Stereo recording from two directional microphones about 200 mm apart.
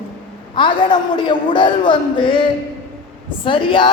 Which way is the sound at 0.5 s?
25° left (ahead or behind).